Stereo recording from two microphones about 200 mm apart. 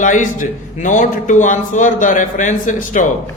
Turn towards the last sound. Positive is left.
turn(degrees=40)  # may be behind; listen again after turning